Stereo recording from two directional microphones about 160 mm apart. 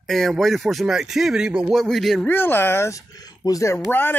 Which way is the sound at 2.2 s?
10° left (ahead or behind).